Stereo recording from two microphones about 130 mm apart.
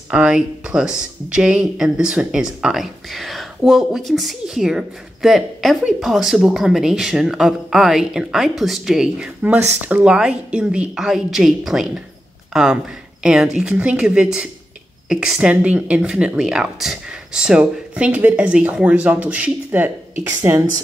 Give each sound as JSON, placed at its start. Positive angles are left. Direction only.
{"t": 0.1, "sound": "speech", "side_deg": -5}